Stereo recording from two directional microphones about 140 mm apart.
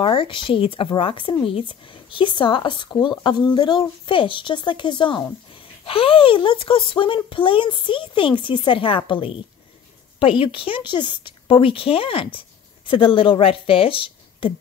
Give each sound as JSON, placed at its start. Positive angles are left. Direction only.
{"t": 0.0, "sound": "speech", "side_deg": 35}